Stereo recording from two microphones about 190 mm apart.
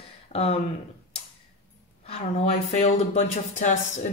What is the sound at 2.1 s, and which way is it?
Speech, 35° left (ahead or behind).